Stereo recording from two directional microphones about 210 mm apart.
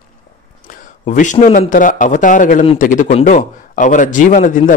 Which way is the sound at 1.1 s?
35° left (ahead or behind).